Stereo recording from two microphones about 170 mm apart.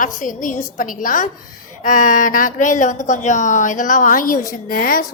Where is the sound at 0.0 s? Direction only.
50° left (ahead or behind).